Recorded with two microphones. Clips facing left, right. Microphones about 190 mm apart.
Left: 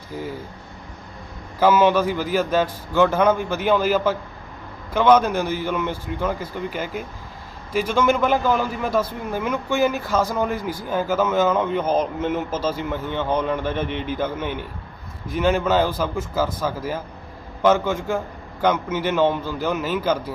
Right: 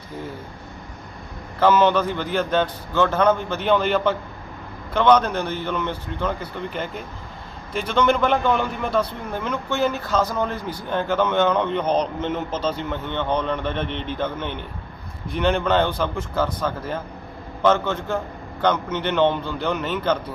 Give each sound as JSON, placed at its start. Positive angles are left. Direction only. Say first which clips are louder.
{"t": 1.5, "sound": "a man's voice", "louder": "left 1 dB", "side_deg": 5}